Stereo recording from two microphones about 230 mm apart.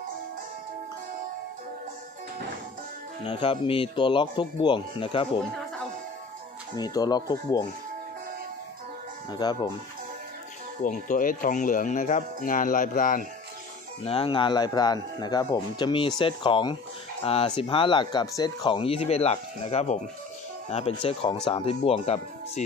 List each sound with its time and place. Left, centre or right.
3.3 s speech: left
6.8 s speech: centre
9.3 s speech: centre
10.8 s speech: left
14.0 s speech: left